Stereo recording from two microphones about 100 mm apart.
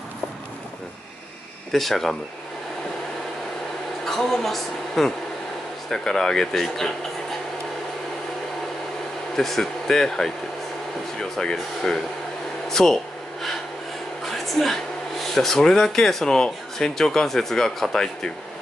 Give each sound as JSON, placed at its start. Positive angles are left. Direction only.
{"t": 1.7, "sound": "speech", "side_deg": 0}
{"t": 4.0, "sound": "a woman's voice", "side_deg": 5}
{"t": 9.4, "sound": "speech", "side_deg": 5}
{"t": 12.6, "sound": "a sound", "side_deg": 5}
{"t": 14.3, "sound": "speech", "side_deg": 0}